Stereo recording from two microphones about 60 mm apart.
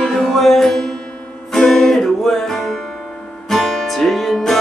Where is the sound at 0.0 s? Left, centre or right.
Centre.